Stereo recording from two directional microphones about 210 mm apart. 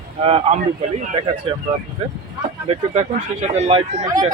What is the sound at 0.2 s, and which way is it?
Speech, 30° right (ahead or behind).